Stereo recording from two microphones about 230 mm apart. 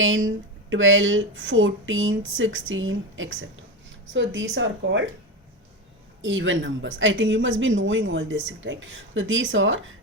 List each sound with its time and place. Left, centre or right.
0.0 s speech: right
6.2 s speech: right